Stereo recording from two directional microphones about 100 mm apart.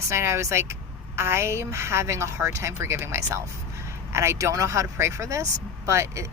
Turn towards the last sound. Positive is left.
turn(degrees=-30)  # may be behind; listen again after turning